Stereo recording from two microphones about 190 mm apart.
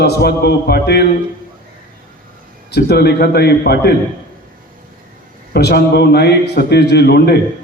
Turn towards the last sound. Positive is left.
turn(degrees=55)  # may be behind; listen again after turning